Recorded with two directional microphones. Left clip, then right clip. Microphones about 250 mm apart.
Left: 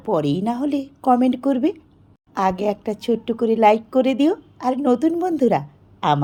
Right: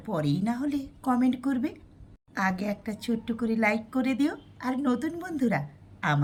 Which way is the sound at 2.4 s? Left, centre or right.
Left.